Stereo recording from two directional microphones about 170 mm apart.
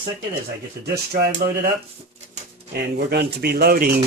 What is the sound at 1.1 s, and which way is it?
Speech, 60° right (ahead or behind).